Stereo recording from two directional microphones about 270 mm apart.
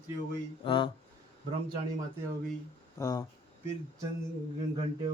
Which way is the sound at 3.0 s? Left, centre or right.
Centre.